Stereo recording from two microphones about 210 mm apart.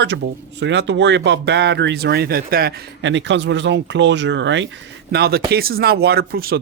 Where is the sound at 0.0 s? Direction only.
55° right (ahead or behind).